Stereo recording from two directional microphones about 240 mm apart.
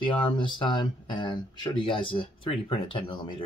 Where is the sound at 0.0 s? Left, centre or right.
Centre.